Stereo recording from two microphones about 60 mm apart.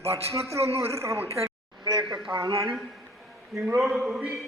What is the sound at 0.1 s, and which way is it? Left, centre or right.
A man's voice, right.